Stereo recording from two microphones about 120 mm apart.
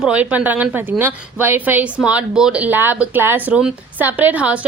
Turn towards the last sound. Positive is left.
turn(degrees=-10)  # may be behind; listen again after turning